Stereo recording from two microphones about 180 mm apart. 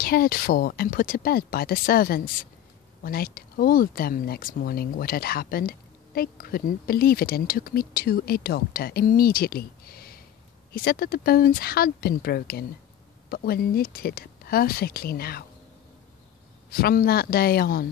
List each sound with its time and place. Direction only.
0.0 s speech: 55° left (ahead or behind)
16.7 s speech: 55° left (ahead or behind)